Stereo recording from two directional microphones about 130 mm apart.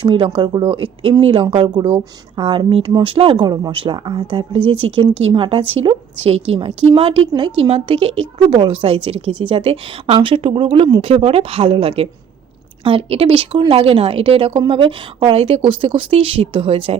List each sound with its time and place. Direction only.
0.0 s speech: 40° right (ahead or behind)
11.1 s speech: 50° right (ahead or behind)